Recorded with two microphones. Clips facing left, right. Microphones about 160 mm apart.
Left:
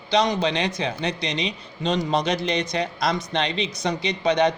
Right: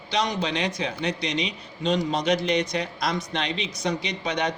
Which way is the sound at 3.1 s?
25° left (ahead or behind).